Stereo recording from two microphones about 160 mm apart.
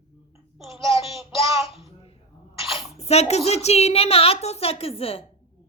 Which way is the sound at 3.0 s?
40° left (ahead or behind).